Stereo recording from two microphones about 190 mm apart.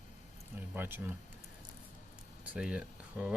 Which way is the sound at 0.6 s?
10° right (ahead or behind).